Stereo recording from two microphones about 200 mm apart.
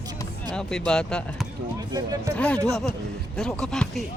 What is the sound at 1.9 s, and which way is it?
Speech, 15° right (ahead or behind).